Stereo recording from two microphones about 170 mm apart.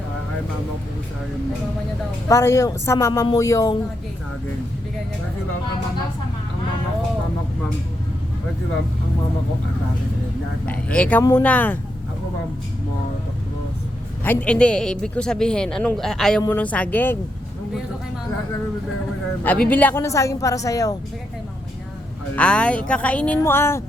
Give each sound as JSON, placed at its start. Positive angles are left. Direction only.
{"t": 2.3, "sound": "speech", "side_deg": 15}
{"t": 10.7, "sound": "speech", "side_deg": 5}
{"t": 14.3, "sound": "a woman's voice", "side_deg": 5}
{"t": 19.4, "sound": "speech", "side_deg": 10}
{"t": 22.4, "sound": "a woman's voice", "side_deg": 5}